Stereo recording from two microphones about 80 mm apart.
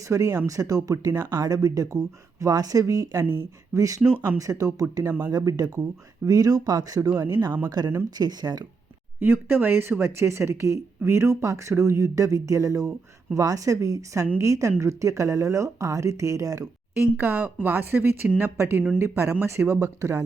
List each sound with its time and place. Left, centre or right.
0.1 s speech: right
7.8 s speech: right
9.2 s speech: right
17.0 s speech: right